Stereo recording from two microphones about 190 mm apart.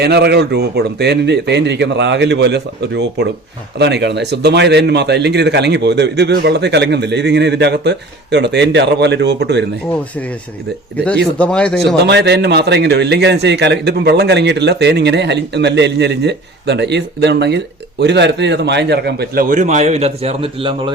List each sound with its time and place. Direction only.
0.0 s a man's voice: 60° right (ahead or behind)
9.9 s speech: 5° left (ahead or behind)
11.9 s a man's voice: 60° right (ahead or behind); by 20.9 s 25° right (ahead or behind)